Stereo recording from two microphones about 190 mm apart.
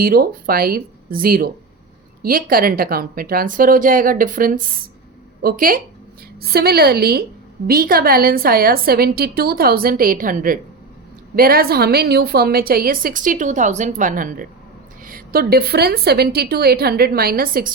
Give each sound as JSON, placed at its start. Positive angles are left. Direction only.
{"t": 0.0, "sound": "a woman's voice", "side_deg": -50}